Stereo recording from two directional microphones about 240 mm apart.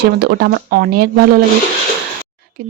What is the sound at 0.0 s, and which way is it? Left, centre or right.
Speech, right.